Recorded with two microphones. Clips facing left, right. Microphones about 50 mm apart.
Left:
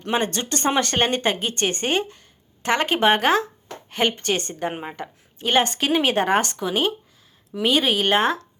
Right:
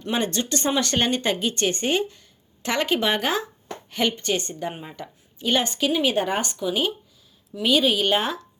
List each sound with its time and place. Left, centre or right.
0.1 s speech: left